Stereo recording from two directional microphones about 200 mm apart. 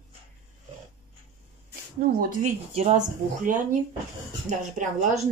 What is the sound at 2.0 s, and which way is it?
Speech, 40° right (ahead or behind).